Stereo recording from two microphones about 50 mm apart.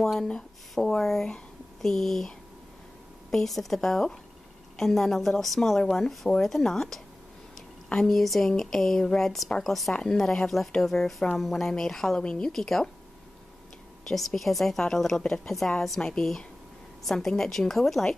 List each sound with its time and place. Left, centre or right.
0.0 s a woman's voice: centre
14.0 s a woman's voice: centre
17.0 s a woman's voice: centre